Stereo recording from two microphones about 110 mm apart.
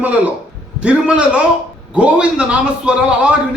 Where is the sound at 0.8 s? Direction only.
10° right (ahead or behind).